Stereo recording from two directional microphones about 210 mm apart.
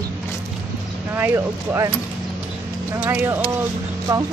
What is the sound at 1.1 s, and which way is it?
Speech, 10° right (ahead or behind).